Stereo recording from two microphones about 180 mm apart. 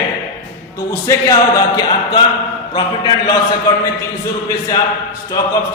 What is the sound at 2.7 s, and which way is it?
Speech, 20° left (ahead or behind).